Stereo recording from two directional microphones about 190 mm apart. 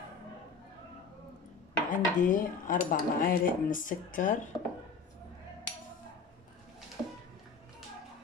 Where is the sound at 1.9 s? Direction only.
45° left (ahead or behind).